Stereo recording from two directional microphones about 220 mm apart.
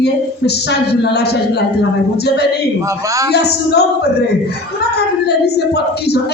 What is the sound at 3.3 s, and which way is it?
Speech, 50° left (ahead or behind).